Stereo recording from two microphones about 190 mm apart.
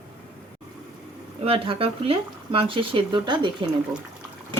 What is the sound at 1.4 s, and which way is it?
Speech, 30° right (ahead or behind).